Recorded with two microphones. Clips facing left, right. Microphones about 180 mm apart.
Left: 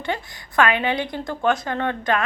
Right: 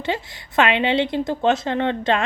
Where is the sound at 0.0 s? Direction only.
25° right (ahead or behind).